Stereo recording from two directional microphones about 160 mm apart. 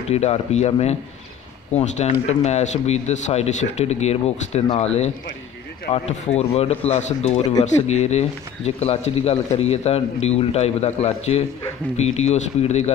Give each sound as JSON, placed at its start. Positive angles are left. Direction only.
{"t": 0.1, "sound": "speech", "side_deg": 40}